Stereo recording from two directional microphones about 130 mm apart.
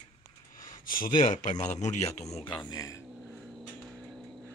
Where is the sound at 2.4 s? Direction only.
35° left (ahead or behind).